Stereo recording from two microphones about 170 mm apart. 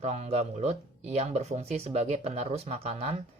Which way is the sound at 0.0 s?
40° right (ahead or behind).